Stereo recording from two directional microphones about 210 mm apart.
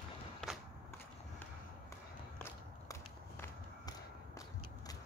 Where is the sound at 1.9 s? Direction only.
15° left (ahead or behind).